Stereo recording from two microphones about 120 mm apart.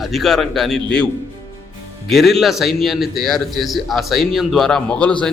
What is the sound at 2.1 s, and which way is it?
A man's voice, centre (ahead or behind).